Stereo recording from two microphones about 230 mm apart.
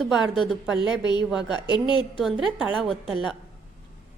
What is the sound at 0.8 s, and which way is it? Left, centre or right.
Speech, centre.